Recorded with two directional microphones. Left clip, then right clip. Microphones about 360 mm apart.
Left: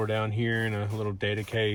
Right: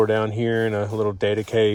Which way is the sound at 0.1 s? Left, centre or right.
Centre.